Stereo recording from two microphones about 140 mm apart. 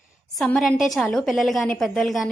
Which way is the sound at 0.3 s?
Centre (ahead or behind).